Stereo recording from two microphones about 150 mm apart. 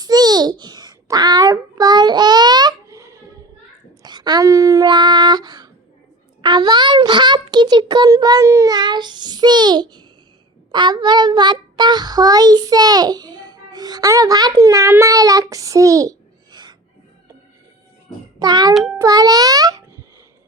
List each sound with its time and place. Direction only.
0.0 s babbling: 25° right (ahead or behind)
4.0 s a sound: 30° right (ahead or behind)
10.7 s child singing: 30° right (ahead or behind)
18.3 s a child's voice: 25° right (ahead or behind)
18.7 s a child's voice: centre (ahead or behind)
18.9 s music: 25° right (ahead or behind)